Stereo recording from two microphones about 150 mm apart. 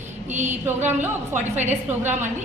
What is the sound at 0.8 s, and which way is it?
Speech, 15° right (ahead or behind).